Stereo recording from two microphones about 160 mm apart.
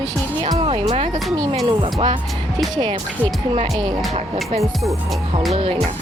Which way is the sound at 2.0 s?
30° right (ahead or behind).